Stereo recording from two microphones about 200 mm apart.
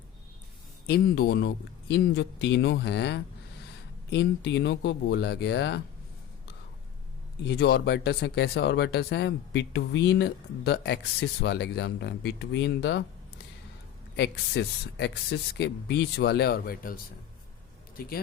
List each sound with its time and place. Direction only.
0.9 s speech: 50° left (ahead or behind)
7.4 s speech: 55° left (ahead or behind)
14.2 s speech: 60° left (ahead or behind)
18.0 s speech: 45° left (ahead or behind)